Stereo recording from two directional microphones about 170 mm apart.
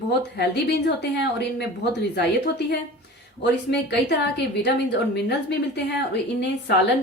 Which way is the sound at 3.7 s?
85° left.